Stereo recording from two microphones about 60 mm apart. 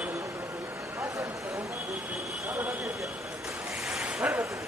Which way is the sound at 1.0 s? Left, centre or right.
Right.